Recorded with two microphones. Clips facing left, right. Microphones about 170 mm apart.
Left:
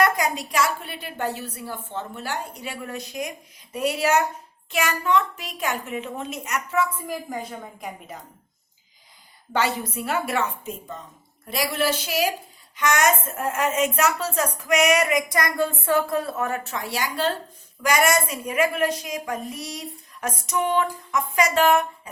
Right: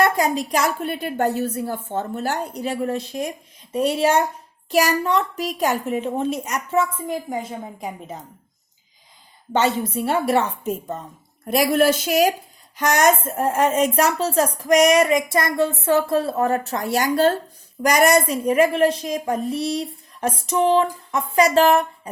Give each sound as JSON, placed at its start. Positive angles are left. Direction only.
{"t": 0.0, "sound": "a woman's voice", "side_deg": -35}
{"t": 9.5, "sound": "a woman's voice", "side_deg": -25}
{"t": 11.4, "sound": "a woman's voice", "side_deg": -50}